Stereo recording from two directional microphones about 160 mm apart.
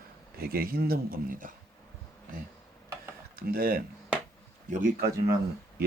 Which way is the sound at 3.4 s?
65° right (ahead or behind).